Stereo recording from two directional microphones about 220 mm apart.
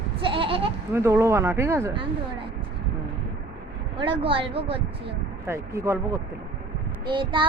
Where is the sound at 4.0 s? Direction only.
25° right (ahead or behind).